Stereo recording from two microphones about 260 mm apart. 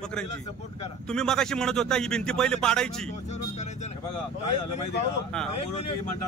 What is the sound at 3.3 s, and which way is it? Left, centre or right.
Vehicle, left.